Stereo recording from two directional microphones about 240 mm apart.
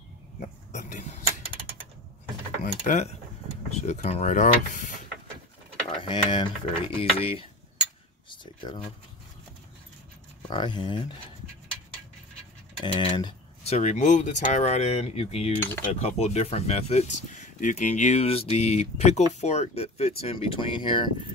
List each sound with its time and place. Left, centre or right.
0.4 s a sound: left
2.6 s speech: left
6.0 s speech: centre
8.3 s a sound: centre
10.5 s speech: centre
12.8 s speech: left